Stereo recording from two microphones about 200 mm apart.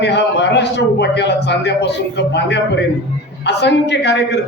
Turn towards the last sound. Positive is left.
turn(degrees=60)  # may be behind; listen again after turning